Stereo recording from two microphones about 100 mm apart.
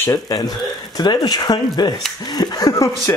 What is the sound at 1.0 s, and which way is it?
Speech, 45° left (ahead or behind).